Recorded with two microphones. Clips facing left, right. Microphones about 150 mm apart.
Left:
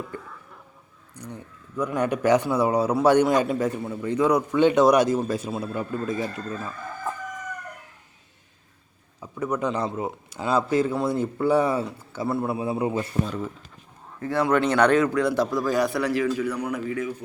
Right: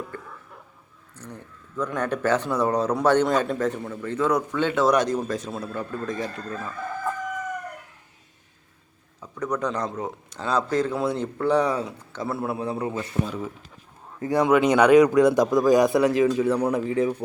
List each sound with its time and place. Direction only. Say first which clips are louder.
0.1 s speech: left 1 dB; 15° left (ahead or behind)
9.2 s speech: left 1 dB; 10° left (ahead or behind)
13.2 s speech: left 1 dB; 5° right (ahead or behind)
14.2 s speech: right 3 dB; 15° right (ahead or behind)